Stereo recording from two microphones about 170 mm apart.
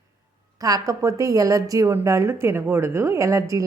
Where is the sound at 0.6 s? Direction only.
20° right (ahead or behind).